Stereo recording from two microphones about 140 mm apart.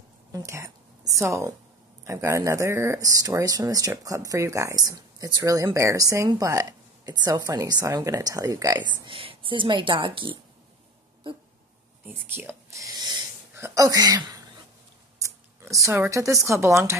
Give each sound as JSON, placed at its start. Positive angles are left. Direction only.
{"t": 0.3, "sound": "a woman's voice", "side_deg": -20}
{"t": 9.0, "sound": "speech", "side_deg": -40}
{"t": 12.1, "sound": "speech", "side_deg": -15}